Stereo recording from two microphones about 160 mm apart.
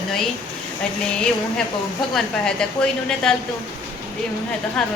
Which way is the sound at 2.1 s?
5° left (ahead or behind).